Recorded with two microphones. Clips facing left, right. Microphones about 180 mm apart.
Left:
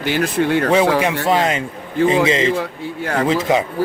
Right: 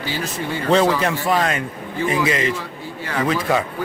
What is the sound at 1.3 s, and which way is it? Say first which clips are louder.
Speech: left 3 dB; 25° left (ahead or behind).